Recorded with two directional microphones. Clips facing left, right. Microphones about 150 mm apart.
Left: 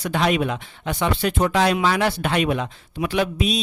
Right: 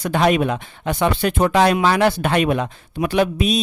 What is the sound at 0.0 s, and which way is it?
Speech, 50° right (ahead or behind).